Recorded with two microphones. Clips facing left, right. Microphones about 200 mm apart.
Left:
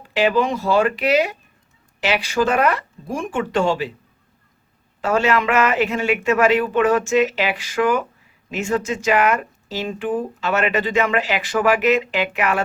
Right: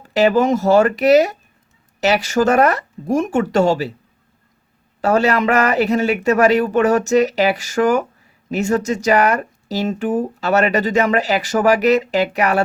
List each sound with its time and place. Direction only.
0.0 s speech: 40° right (ahead or behind)
4.9 s speech: 40° right (ahead or behind)